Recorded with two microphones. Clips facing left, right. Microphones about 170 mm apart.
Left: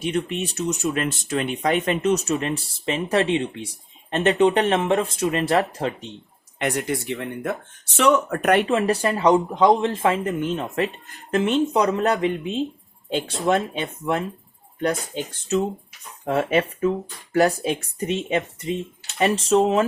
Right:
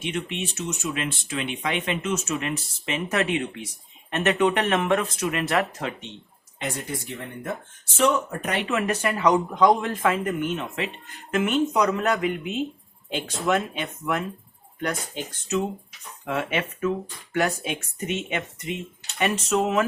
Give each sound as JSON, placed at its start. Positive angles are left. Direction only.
{"t": 0.0, "sound": "speech", "side_deg": 40}
{"t": 6.6, "sound": "speech", "side_deg": 75}
{"t": 8.6, "sound": "speech", "side_deg": 35}